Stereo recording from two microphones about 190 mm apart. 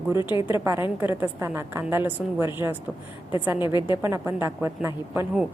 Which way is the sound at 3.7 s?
20° left (ahead or behind).